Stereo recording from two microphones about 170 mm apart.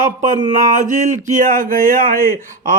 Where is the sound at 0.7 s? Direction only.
50° right (ahead or behind).